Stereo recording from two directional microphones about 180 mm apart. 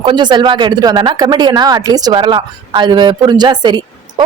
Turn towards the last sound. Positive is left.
turn(degrees=-25)  # may be behind; listen again after turning